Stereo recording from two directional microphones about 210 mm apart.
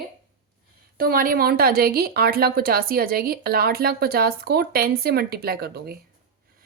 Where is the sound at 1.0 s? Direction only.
45° right (ahead or behind).